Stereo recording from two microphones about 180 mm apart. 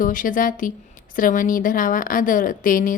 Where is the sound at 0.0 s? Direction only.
50° left (ahead or behind).